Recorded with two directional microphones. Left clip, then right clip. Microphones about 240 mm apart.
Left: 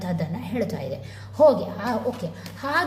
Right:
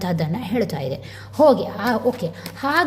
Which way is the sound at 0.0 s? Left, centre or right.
Right.